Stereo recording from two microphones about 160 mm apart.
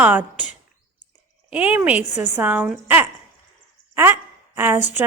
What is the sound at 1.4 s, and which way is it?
A woman's voice, 10° right (ahead or behind).